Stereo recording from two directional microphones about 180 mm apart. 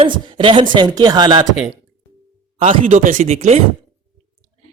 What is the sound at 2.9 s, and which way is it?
Speech, 45° right (ahead or behind).